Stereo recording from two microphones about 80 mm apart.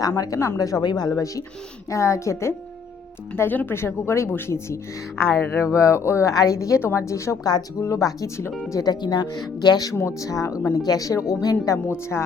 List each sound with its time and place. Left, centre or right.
0.3 s speech: left
3.3 s speech: left
5.6 s speech: left
6.3 s speech: left
8.7 s speech: left
9.9 s speech: left